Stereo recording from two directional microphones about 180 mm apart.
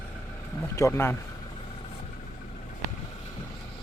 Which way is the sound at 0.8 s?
15° left (ahead or behind).